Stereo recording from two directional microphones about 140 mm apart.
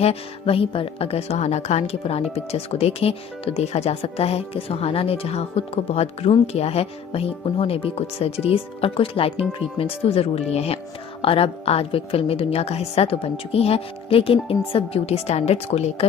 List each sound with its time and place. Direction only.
0.0 s a woman's voice: 45° left (ahead or behind)